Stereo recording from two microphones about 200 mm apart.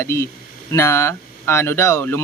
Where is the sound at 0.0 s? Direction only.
15° left (ahead or behind).